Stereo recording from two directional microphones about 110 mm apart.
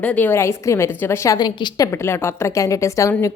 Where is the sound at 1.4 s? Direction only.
40° left (ahead or behind).